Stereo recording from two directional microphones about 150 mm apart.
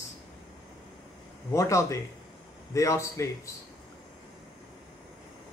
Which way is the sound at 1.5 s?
20° left (ahead or behind).